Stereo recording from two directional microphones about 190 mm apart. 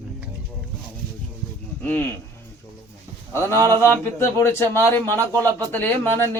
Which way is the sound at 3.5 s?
15° right (ahead or behind).